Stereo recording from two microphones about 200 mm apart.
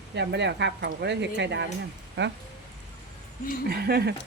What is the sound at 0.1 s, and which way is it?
Speech, 60° right (ahead or behind).